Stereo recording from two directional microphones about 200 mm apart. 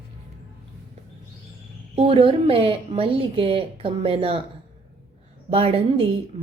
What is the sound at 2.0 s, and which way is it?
Speech, 25° right (ahead or behind).